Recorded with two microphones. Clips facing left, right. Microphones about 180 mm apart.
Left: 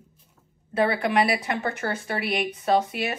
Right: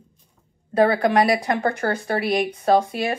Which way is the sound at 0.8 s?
50° right (ahead or behind).